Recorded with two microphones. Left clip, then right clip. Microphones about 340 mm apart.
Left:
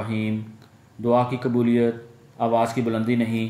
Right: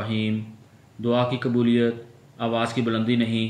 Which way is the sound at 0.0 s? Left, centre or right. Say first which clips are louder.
Right 1 dB; centre.